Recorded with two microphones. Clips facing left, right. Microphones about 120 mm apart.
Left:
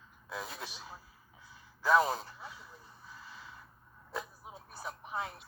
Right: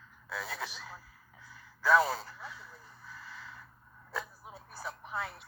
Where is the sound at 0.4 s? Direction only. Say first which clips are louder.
Right 4 dB; 80° right.